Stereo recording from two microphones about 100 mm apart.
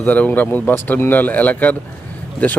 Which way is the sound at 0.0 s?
15° left (ahead or behind).